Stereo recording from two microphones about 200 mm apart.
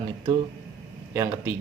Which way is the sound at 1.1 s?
15° right (ahead or behind).